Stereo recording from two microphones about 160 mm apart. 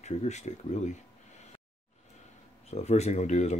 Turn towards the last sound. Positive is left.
turn(degrees=45)  # may be behind; listen again after turning